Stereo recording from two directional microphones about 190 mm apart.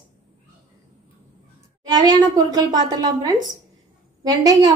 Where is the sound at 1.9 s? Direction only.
20° right (ahead or behind).